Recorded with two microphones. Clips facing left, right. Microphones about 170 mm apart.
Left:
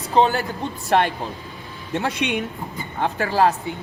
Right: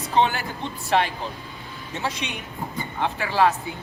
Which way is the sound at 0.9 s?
55° left (ahead or behind).